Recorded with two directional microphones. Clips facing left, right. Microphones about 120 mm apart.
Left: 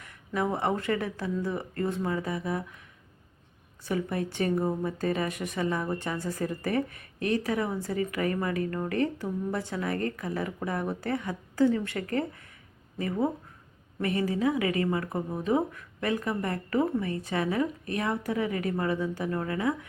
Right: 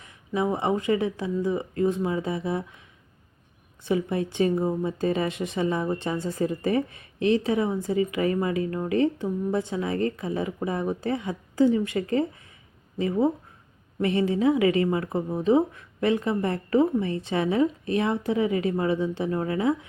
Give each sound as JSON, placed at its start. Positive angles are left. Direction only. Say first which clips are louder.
{"t": 0.0, "sound": "speech", "louder": "right 3 dB", "side_deg": -15}
{"t": 3.8, "sound": "a woman's voice", "louder": "right 4 dB", "side_deg": -20}